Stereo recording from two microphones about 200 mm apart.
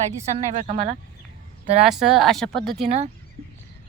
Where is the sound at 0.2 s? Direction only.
35° right (ahead or behind).